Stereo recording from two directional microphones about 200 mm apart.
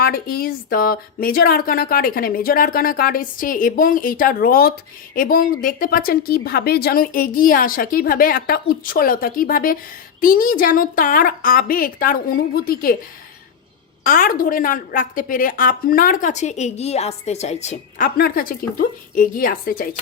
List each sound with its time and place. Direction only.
0.0 s a woman's voice: 50° left (ahead or behind)
14.0 s a woman's voice: 45° left (ahead or behind)